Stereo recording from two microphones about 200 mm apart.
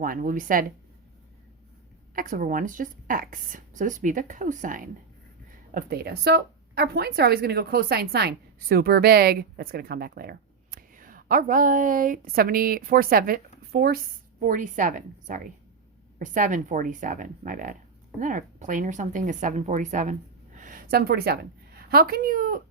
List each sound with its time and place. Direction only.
0.0 s a woman's voice: 45° right (ahead or behind)
2.1 s a woman's voice: 45° right (ahead or behind)